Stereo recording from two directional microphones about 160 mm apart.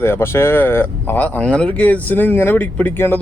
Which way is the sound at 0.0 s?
15° left (ahead or behind).